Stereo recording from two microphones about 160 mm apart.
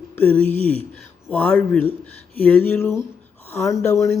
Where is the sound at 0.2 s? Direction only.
10° left (ahead or behind).